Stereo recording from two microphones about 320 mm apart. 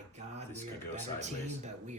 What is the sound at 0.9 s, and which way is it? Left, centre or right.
Speech, right.